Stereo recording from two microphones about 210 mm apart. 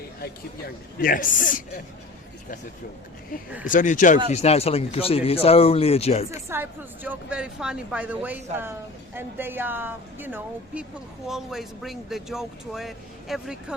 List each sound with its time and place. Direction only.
0.9 s speech: 40° left (ahead or behind)
3.6 s speech: 40° left (ahead or behind)
6.5 s speech: 10° right (ahead or behind)